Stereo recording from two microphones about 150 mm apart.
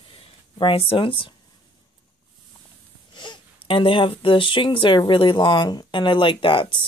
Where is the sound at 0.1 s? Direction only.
35° left (ahead or behind).